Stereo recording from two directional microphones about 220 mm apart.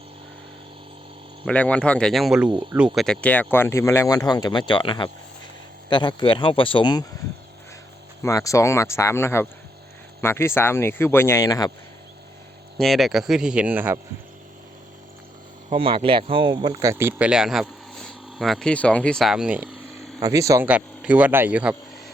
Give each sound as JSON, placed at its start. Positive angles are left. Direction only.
{"t": 1.5, "sound": "speech", "side_deg": 5}
{"t": 8.2, "sound": "speech", "side_deg": 15}
{"t": 12.7, "sound": "speech", "side_deg": 0}
{"t": 15.7, "sound": "speech", "side_deg": -25}
{"t": 20.1, "sound": "speech", "side_deg": -15}